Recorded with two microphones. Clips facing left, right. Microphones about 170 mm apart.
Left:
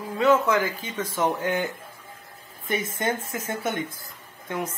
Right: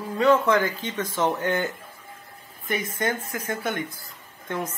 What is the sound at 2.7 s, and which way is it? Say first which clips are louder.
Speech: even; 25° left (ahead or behind).